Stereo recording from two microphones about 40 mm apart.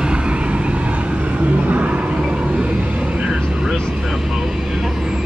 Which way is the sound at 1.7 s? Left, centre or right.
Right.